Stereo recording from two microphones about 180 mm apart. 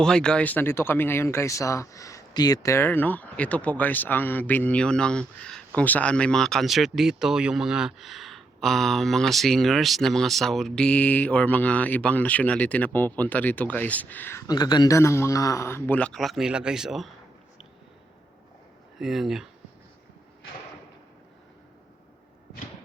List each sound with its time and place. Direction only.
0.0 s speech: 5° left (ahead or behind)
18.9 s speech: centre (ahead or behind)